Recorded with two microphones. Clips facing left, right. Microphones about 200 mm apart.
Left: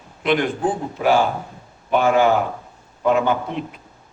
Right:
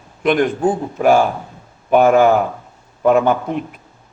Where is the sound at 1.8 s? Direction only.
50° right (ahead or behind).